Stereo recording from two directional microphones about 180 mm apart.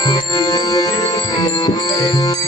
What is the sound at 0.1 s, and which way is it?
Music, 20° left (ahead or behind).